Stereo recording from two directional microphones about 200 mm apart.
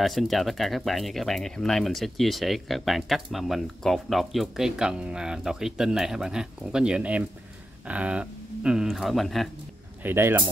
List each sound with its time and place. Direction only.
0.0 s speech: centre (ahead or behind)
10.0 s speech: 10° right (ahead or behind)